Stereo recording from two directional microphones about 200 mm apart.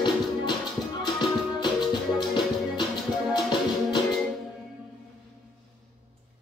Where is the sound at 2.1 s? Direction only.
20° left (ahead or behind).